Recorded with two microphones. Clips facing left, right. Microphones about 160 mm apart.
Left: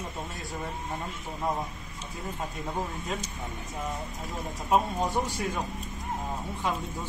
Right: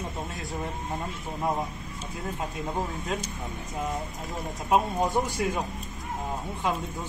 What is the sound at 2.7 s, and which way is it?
Speech, 15° right (ahead or behind).